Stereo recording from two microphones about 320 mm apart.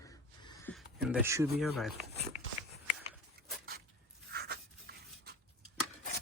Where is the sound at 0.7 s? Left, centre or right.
Centre.